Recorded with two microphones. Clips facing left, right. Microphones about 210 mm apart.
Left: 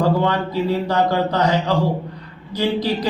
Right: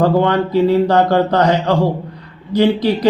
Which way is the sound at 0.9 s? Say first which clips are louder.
Right 5 dB; 60° right (ahead or behind).